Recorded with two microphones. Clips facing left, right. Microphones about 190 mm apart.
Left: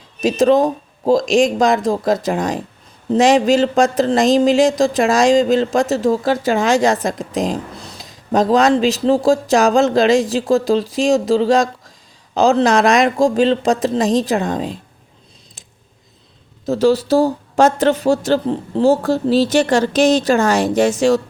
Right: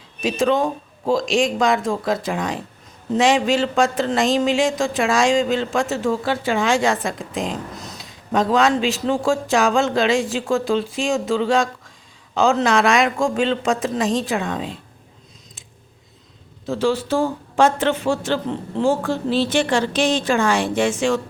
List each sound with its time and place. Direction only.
0.2 s speech: 40° left (ahead or behind)
16.6 s speech: 40° left (ahead or behind)